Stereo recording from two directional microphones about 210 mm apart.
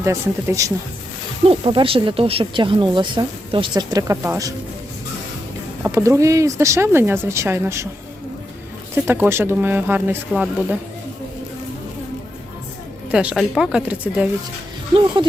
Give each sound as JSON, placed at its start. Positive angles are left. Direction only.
{"t": 0.0, "sound": "speech", "side_deg": -15}
{"t": 1.5, "sound": "speech", "side_deg": -25}
{"t": 5.8, "sound": "speech", "side_deg": -15}
{"t": 9.0, "sound": "speech", "side_deg": -10}
{"t": 13.1, "sound": "a woman's voice", "side_deg": -5}
{"t": 14.9, "sound": "speech", "side_deg": -25}